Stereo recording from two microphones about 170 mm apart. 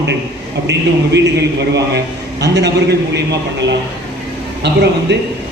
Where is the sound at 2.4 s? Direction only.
80° right.